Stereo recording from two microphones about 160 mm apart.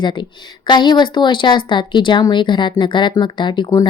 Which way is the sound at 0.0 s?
30° left (ahead or behind).